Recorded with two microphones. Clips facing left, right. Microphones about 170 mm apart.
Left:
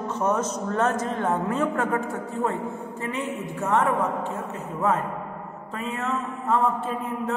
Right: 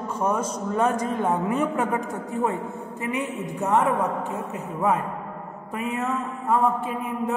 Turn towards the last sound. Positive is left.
turn(degrees=-10)  # may be behind; listen again after turning